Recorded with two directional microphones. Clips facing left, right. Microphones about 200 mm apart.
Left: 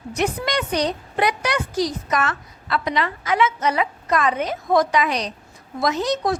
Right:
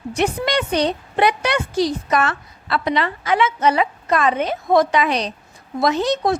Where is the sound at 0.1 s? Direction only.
30° right (ahead or behind).